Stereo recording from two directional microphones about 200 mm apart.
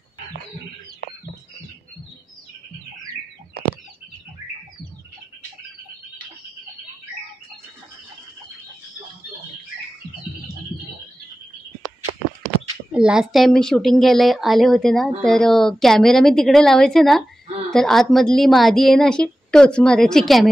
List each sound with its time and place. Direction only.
12.9 s a woman's voice: 5° right (ahead or behind)